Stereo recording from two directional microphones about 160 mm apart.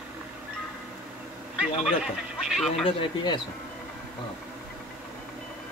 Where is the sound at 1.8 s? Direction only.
5° right (ahead or behind).